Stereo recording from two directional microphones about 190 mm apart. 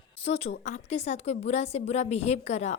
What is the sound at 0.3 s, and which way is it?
A woman's voice, 30° left (ahead or behind).